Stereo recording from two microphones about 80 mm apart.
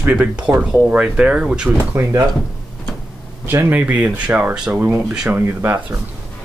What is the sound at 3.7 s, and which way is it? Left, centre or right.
Speech, centre.